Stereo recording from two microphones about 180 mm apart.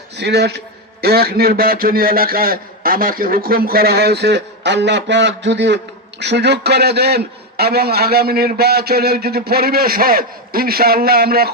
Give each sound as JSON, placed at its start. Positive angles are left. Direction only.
{"t": 0.2, "sound": "a man's voice", "side_deg": -70}